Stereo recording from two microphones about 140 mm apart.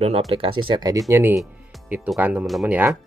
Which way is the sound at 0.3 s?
40° right (ahead or behind).